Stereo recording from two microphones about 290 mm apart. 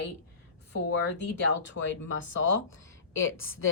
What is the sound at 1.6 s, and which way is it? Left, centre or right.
A woman's voice, left.